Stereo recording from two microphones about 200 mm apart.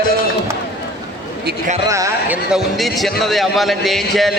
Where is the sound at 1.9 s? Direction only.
15° right (ahead or behind).